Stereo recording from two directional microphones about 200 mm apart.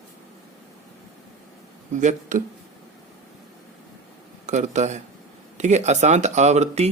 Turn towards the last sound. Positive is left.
turn(degrees=-35)  # may be behind; listen again after turning